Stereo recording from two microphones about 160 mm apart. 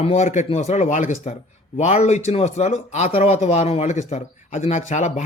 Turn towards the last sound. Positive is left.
turn(degrees=45)  # may be behind; listen again after turning